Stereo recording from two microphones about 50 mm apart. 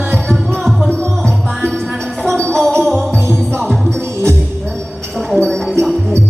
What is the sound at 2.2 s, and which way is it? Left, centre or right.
Music, centre.